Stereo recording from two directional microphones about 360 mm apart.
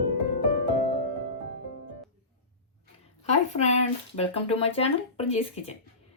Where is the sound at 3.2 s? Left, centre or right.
Centre.